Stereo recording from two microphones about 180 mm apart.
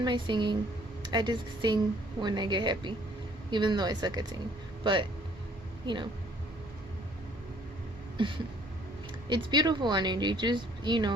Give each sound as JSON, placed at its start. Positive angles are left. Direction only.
{"t": 0.0, "sound": "speech", "side_deg": -25}
{"t": 8.2, "sound": "speech", "side_deg": -25}